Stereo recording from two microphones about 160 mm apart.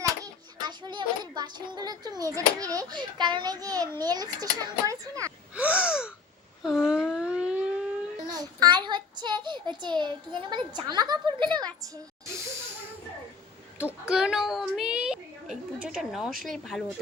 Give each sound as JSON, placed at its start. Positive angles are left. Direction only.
{"t": 0.6, "sound": "a child's voice", "side_deg": -30}
{"t": 5.5, "sound": "gasp", "side_deg": -10}
{"t": 6.6, "sound": "wail", "side_deg": 0}
{"t": 8.3, "sound": "a child's voice", "side_deg": -25}
{"t": 14.1, "sound": "a child's voice", "side_deg": -5}